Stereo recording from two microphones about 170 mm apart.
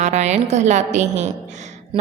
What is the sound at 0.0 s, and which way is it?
A woman's voice, 45° right (ahead or behind).